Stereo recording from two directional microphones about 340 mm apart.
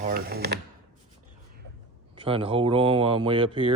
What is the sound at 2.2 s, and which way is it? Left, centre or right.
Speech, centre.